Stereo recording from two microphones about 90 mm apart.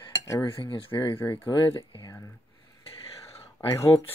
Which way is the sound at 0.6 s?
80° left.